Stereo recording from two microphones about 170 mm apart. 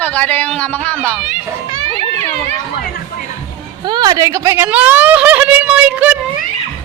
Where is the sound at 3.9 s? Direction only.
25° right (ahead or behind); by 6.2 s 10° right (ahead or behind).